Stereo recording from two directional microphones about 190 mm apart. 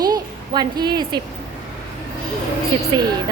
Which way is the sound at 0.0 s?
20° right (ahead or behind).